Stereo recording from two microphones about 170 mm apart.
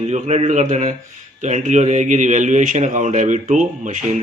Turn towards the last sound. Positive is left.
turn(degrees=-50)  # may be behind; listen again after turning